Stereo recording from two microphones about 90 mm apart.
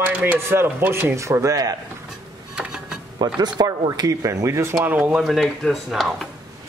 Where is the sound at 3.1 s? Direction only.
55° right (ahead or behind); by 4.8 s 35° right (ahead or behind).